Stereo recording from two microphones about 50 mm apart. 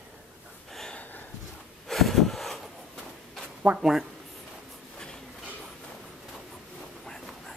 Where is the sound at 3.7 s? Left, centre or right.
Right.